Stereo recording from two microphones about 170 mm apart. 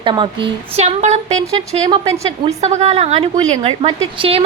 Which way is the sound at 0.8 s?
40° right (ahead or behind).